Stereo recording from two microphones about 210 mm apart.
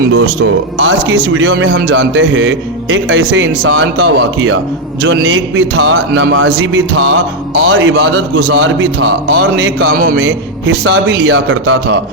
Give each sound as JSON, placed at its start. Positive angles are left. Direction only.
{"t": 0.1, "sound": "a man's voice", "side_deg": -65}